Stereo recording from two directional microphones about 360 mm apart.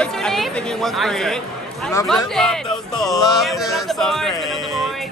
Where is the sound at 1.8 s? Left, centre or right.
Centre.